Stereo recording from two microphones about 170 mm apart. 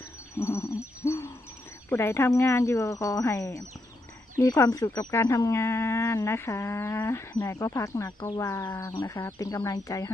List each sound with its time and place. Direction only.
0.3 s wind chime: 15° left (ahead or behind)
1.0 s hoot: 15° left (ahead or behind)
1.9 s speech: 15° left (ahead or behind)